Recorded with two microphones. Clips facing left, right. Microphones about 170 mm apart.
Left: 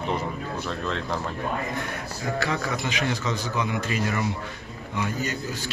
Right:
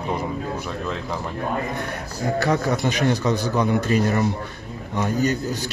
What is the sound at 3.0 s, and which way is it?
Speech, 35° right (ahead or behind).